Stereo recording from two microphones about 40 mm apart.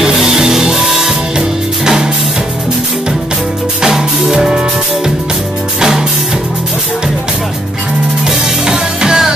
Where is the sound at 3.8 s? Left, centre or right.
Centre.